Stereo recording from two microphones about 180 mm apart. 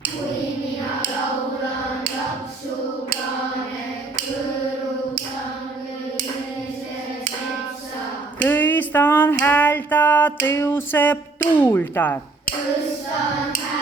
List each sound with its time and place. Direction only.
8.4 s music: 10° left (ahead or behind)